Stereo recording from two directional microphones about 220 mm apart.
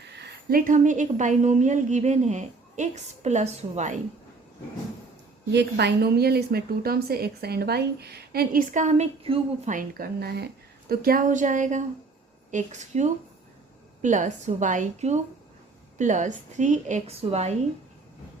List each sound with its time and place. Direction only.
0.2 s a woman's voice: 45° right (ahead or behind)
5.5 s a woman's voice: 50° right (ahead or behind); by 9.7 s 30° right (ahead or behind)
9.7 s a woman's voice: 45° right (ahead or behind); by 17.5 s 30° right (ahead or behind)